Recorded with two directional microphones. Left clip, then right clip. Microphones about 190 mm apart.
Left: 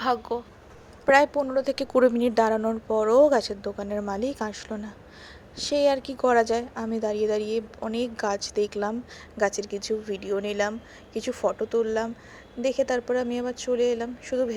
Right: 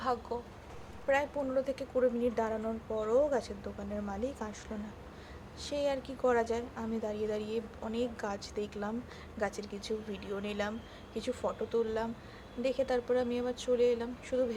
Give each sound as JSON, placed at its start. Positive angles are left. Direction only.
{"t": 0.0, "sound": "a woman's voice", "side_deg": 35}
{"t": 1.0, "sound": "a woman's voice", "side_deg": 50}